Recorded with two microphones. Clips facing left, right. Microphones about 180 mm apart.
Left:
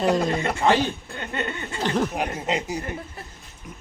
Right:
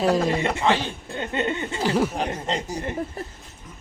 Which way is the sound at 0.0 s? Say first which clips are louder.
Right 1 dB; 5° right (ahead or behind).